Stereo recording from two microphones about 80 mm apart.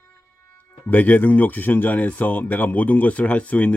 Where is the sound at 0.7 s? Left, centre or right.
Left.